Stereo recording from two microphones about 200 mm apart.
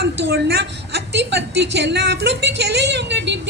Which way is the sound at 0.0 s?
50° right (ahead or behind).